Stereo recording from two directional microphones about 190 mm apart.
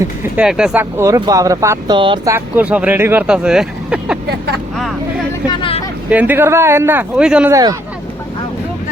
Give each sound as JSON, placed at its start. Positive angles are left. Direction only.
{"t": 0.0, "sound": "speech", "side_deg": -10}
{"t": 2.3, "sound": "speech", "side_deg": -10}
{"t": 5.5, "sound": "vehicle", "side_deg": 30}
{"t": 6.1, "sound": "speech", "side_deg": -10}
{"t": 7.5, "sound": "speech", "side_deg": -15}